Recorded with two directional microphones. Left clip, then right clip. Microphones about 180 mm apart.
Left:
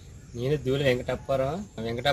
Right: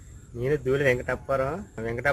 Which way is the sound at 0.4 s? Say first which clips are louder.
Right 2 dB; centre (ahead or behind).